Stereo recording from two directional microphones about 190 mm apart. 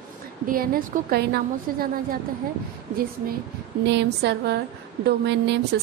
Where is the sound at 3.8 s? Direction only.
65° right (ahead or behind).